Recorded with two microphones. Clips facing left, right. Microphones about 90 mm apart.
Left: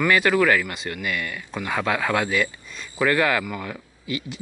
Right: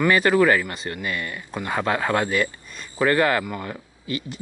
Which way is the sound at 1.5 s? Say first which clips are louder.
Right 1 dB; 5° right (ahead or behind).